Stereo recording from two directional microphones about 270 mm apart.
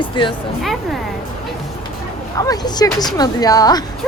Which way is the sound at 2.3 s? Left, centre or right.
Centre.